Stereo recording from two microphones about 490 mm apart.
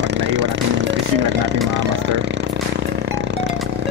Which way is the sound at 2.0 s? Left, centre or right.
Right.